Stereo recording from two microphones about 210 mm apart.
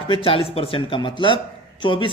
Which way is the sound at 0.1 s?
25° left (ahead or behind).